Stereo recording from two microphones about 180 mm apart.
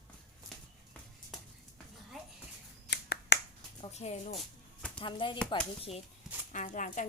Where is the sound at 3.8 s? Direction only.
35° left (ahead or behind).